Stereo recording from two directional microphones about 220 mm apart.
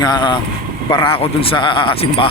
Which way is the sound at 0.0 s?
20° left (ahead or behind).